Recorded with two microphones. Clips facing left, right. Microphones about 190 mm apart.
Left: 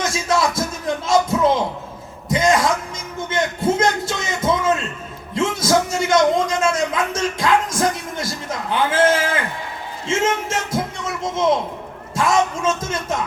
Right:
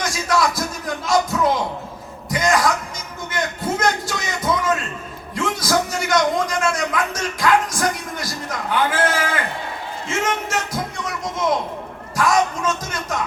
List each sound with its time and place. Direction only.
0.0 s music: 25° left (ahead or behind)
3.2 s a sound: 25° left (ahead or behind)
5.3 s a man's voice: 25° left (ahead or behind)